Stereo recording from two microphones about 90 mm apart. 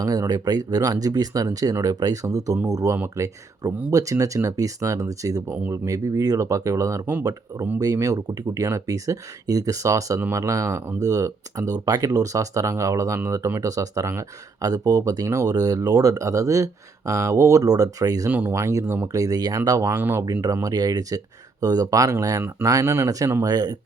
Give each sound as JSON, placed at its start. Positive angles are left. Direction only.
{"t": 0.0, "sound": "speech", "side_deg": -40}
{"t": 18.3, "sound": "speech", "side_deg": -20}
{"t": 18.6, "sound": "speech", "side_deg": -35}
{"t": 19.9, "sound": "speech", "side_deg": -25}
{"t": 20.4, "sound": "speech", "side_deg": -40}